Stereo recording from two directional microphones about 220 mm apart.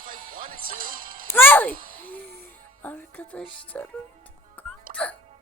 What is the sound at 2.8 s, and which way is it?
Speech, 5° left (ahead or behind).